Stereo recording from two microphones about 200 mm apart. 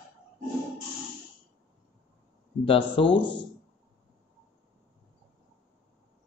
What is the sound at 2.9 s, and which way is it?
Speech, 25° left (ahead or behind).